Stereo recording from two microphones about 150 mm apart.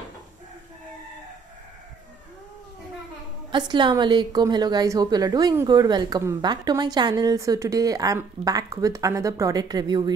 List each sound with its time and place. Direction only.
3.5 s a woman's voice: 30° right (ahead or behind)